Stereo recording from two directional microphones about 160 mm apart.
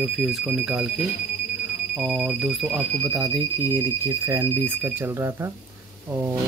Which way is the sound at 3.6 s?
15° right (ahead or behind).